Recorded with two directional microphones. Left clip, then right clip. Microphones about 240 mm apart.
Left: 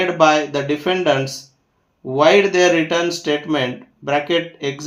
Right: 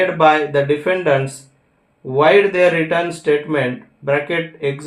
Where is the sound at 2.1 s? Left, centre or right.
Left.